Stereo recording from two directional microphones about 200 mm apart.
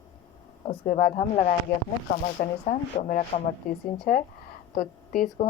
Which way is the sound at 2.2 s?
35° left (ahead or behind).